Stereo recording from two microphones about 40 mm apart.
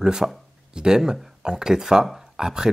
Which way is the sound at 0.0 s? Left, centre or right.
Centre.